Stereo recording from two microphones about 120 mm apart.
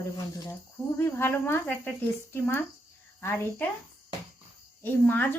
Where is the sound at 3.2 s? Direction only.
15° left (ahead or behind).